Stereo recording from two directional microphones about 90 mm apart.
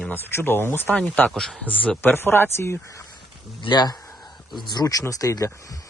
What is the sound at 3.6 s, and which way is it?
Speech, 55° left (ahead or behind).